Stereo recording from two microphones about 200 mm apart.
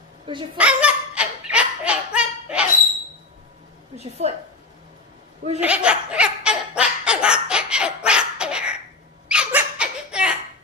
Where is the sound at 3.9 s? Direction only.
30° right (ahead or behind).